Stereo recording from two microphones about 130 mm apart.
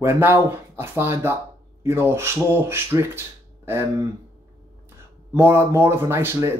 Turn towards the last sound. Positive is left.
turn(degrees=-20)  # may be behind; listen again after turning